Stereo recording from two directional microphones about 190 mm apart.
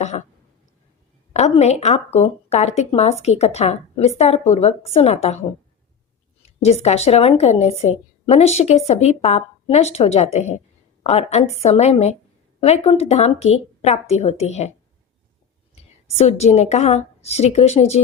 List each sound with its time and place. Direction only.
1.3 s a woman's voice: 35° left (ahead or behind)
6.6 s a woman's voice: 35° left (ahead or behind)
16.1 s a woman's voice: 35° left (ahead or behind)